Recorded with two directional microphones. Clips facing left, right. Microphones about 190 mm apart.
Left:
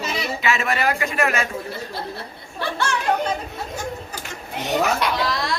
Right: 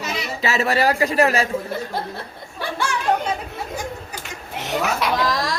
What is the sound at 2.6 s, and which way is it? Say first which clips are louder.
Speech: left 1 dB; 10° right (ahead or behind).